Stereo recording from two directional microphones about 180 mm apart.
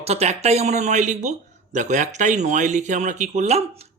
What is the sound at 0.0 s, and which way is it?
Speech, 35° right (ahead or behind).